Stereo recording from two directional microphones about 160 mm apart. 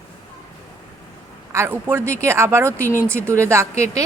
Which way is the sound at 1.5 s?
15° right (ahead or behind).